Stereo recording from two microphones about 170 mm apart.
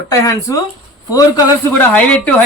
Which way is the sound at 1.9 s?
10° left (ahead or behind).